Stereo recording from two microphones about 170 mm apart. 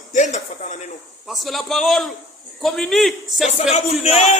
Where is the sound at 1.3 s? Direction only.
Centre (ahead or behind).